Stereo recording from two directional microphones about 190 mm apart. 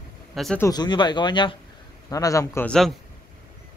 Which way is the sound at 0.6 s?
20° left (ahead or behind).